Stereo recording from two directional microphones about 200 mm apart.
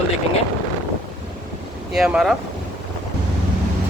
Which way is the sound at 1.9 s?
5° right (ahead or behind).